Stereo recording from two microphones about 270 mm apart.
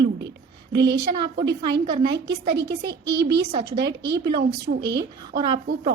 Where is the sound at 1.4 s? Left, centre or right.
Right.